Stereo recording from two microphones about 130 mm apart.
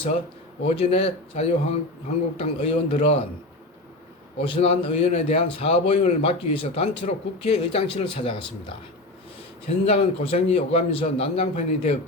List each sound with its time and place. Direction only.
0.7 s a man's voice: 50° left (ahead or behind)
4.4 s a man's voice: 45° left (ahead or behind)
9.6 s a man's voice: 50° left (ahead or behind)